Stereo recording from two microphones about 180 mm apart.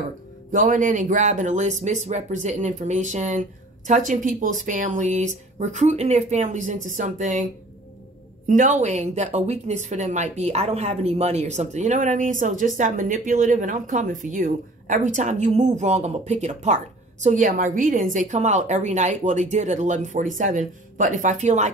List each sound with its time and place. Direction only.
0.5 s a woman's voice: 45° right (ahead or behind)
8.5 s a woman's voice: 45° right (ahead or behind)